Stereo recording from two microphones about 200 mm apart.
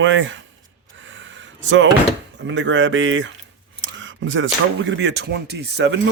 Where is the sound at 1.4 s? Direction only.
70° right (ahead or behind).